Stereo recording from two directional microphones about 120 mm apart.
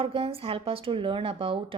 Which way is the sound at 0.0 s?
50° right (ahead or behind).